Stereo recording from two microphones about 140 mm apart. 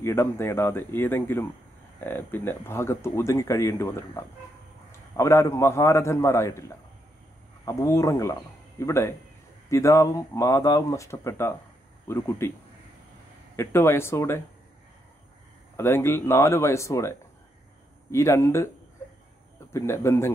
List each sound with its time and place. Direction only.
0.0 s speech: 20° left (ahead or behind)
7.6 s speech: 20° left (ahead or behind)
13.6 s speech: 15° left (ahead or behind)
15.7 s speech: 15° left (ahead or behind)
18.1 s speech: 20° left (ahead or behind)
19.7 s speech: 20° left (ahead or behind)